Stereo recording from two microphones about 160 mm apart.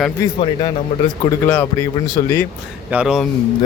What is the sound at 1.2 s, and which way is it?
Speech, 15° left (ahead or behind).